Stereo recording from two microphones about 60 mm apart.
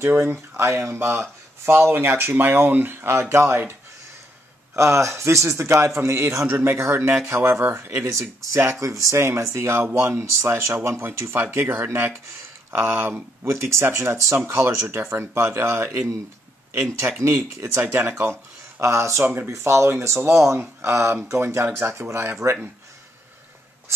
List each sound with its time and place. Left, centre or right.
0.3 s speech: right
4.7 s a man's voice: right
8.5 s a man's voice: right
8.8 s speech: right
9.1 s a man's voice: right
13.4 s a man's voice: right
17.0 s speech: right
17.6 s a man's voice: right
18.8 s a man's voice: right
19.2 s speech: right
19.5 s a man's voice: right